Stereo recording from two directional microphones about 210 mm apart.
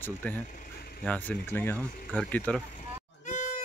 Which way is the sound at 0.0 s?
10° left (ahead or behind).